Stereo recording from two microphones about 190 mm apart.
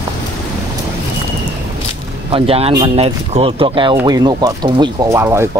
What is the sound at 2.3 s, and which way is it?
Speech, 30° right (ahead or behind).